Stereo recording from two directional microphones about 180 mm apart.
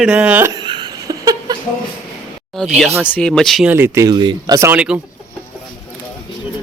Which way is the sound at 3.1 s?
5° left (ahead or behind).